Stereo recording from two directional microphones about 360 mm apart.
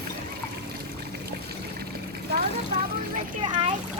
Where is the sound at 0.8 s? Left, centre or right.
Right.